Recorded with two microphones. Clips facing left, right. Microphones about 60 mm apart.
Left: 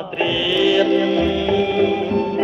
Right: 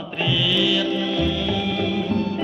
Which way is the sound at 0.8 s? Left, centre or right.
Left.